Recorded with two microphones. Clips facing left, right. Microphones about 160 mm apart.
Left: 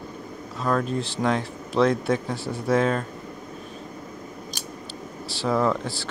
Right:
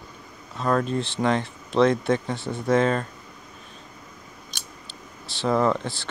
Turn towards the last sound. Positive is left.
turn(degrees=5)  # may be behind; listen again after turning